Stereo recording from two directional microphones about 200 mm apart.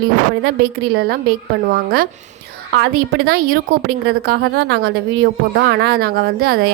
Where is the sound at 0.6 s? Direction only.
50° right (ahead or behind).